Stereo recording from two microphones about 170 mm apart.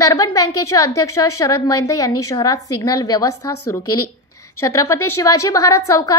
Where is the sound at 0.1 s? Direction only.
20° left (ahead or behind).